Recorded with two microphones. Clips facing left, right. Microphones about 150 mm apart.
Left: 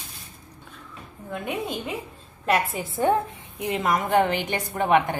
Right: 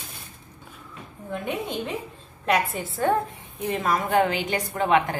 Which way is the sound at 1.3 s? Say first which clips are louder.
Even; 5° left (ahead or behind).